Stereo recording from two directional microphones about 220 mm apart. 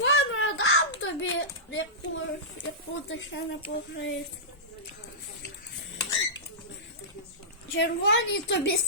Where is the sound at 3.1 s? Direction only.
60° left (ahead or behind).